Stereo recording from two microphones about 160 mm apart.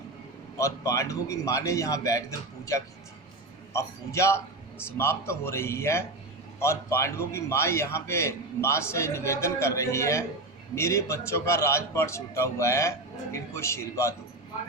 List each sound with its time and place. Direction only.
0.6 s a man's voice: 20° left (ahead or behind)
3.7 s a man's voice: 20° left (ahead or behind)